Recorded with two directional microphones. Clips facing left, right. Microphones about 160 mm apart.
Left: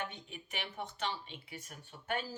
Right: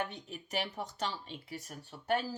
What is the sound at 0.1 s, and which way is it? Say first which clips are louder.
Speech: right 7 dB; 40° right (ahead or behind).